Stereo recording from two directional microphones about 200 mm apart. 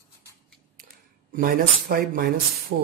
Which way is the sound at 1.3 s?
45° right (ahead or behind).